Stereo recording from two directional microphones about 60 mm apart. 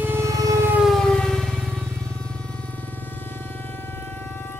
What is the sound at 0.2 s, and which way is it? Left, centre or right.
Vehicle, right.